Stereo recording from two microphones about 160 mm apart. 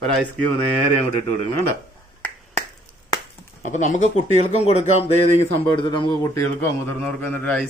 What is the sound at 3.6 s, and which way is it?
Speech, 50° left (ahead or behind).